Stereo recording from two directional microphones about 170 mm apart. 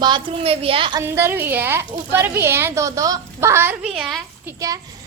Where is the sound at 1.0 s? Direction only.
15° right (ahead or behind).